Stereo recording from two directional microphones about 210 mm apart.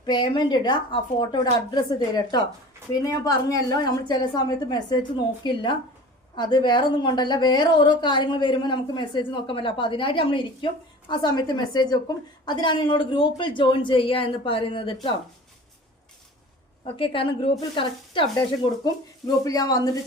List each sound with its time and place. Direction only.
0.0 s a woman's voice: 20° left (ahead or behind)
16.8 s a woman's voice: 25° left (ahead or behind)